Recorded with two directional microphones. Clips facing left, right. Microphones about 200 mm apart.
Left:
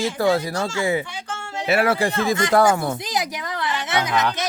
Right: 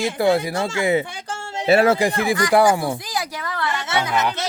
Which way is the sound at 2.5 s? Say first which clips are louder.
Right 1 dB; 15° right (ahead or behind).